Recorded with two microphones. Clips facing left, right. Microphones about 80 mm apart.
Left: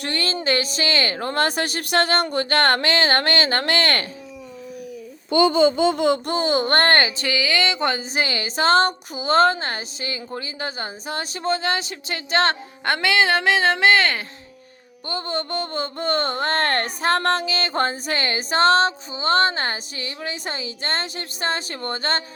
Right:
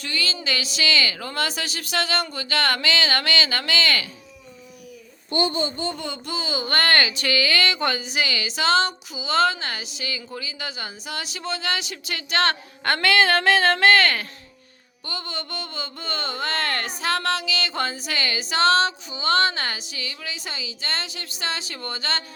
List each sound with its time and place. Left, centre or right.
0.0 s speech: left
5.7 s baby laughter: left
6.2 s speech: left
7.3 s speech: centre
15.0 s speech: left